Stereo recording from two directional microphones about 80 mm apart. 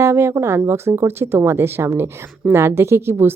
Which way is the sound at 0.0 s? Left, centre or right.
Right.